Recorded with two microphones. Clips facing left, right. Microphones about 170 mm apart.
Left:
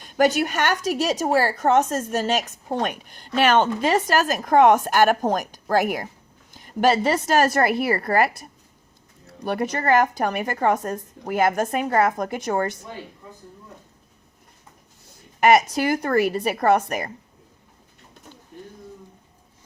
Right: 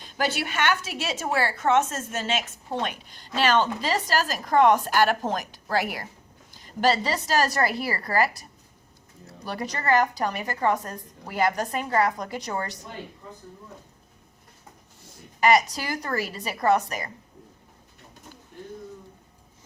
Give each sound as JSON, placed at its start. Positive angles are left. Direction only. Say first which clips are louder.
{"t": 0.0, "sound": "a woman's voice", "louder": "left 8 dB", "side_deg": 45}
{"t": 15.4, "sound": "a woman's voice", "louder": "left 4 dB", "side_deg": 55}